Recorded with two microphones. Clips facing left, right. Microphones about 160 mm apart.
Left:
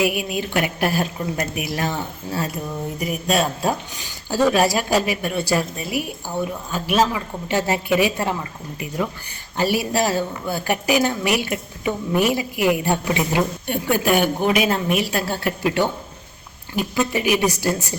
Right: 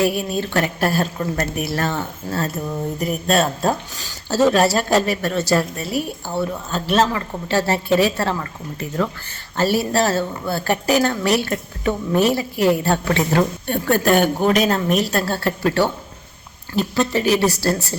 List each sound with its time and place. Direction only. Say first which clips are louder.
0.0 s a woman's voice: right 2 dB; 15° left (ahead or behind)
9.6 s a woman's voice: right 2 dB; 15° left (ahead or behind)